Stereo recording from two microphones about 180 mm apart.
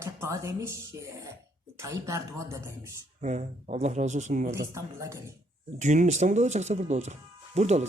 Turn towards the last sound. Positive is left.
turn(degrees=-40)  # may be behind; listen again after turning